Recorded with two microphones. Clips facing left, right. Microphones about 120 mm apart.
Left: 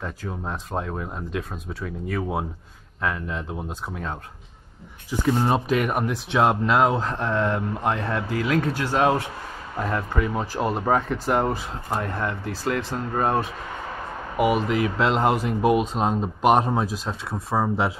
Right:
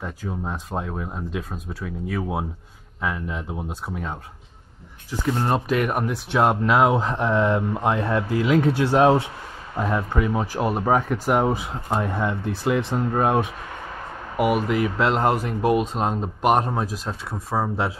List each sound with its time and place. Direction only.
0.0 s speech: centre (ahead or behind)
5.2 s speech: 5° left (ahead or behind)
8.7 s speech: 20° right (ahead or behind); by 17.8 s centre (ahead or behind)